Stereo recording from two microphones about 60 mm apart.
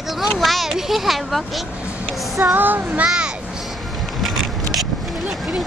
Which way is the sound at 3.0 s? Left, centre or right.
Centre.